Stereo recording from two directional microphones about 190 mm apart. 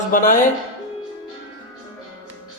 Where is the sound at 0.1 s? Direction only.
45° left (ahead or behind).